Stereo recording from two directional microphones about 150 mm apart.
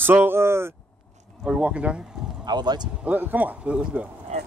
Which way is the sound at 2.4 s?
30° right (ahead or behind).